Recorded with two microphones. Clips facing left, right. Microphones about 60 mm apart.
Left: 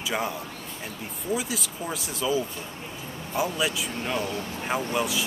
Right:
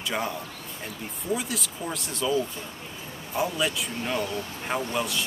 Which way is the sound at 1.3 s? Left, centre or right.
Centre.